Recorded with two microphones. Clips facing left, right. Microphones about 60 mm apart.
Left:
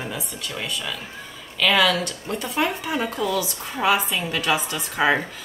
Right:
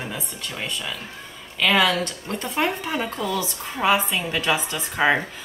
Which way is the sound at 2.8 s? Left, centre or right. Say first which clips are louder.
Left 2 dB; centre.